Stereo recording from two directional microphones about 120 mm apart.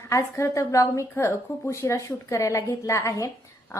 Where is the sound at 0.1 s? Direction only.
25° left (ahead or behind).